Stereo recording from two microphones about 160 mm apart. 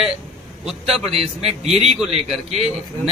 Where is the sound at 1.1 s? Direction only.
40° right (ahead or behind).